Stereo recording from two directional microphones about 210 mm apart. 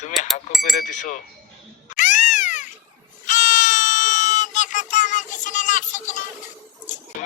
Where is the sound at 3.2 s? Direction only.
35° left (ahead or behind).